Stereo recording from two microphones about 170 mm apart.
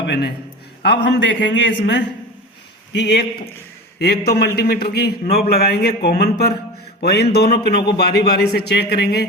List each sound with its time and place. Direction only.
0.1 s a man's voice: 75° left (ahead or behind)
2.9 s a man's voice: 75° left (ahead or behind)